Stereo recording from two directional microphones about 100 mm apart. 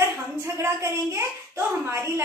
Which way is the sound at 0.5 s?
30° right (ahead or behind).